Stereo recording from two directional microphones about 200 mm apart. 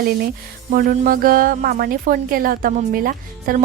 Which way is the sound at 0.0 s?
50° right (ahead or behind).